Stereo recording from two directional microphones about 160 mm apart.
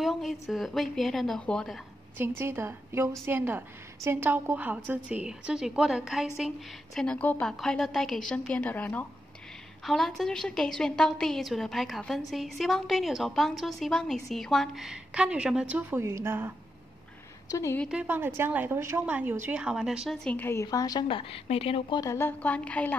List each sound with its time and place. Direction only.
0.0 s a woman's voice: centre (ahead or behind)
2.1 s a woman's voice: 15° right (ahead or behind)
7.0 s a woman's voice: 10° left (ahead or behind); by 16.5 s 15° right (ahead or behind)
17.5 s a woman's voice: 20° left (ahead or behind)
17.8 s a woman's voice: 10° right (ahead or behind)
20.2 s a woman's voice: 15° left (ahead or behind); by 22.0 s 35° left (ahead or behind)
22.0 s a woman's voice: 15° left (ahead or behind)